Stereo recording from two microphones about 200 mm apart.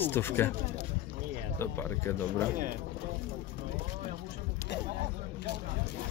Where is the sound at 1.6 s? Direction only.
10° left (ahead or behind).